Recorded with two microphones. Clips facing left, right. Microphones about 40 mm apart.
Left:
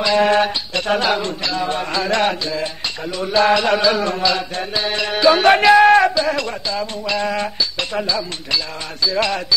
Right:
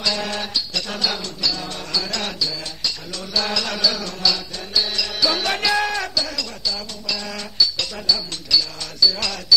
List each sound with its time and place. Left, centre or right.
0.0 s music: left